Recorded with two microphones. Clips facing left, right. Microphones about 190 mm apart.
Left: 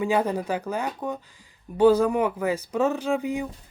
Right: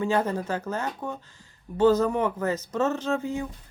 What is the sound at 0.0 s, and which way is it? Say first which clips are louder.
Speech: left 2 dB; 15° left (ahead or behind).